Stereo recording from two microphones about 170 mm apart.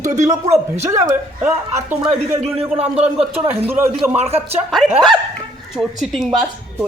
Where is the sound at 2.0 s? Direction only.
35° right (ahead or behind).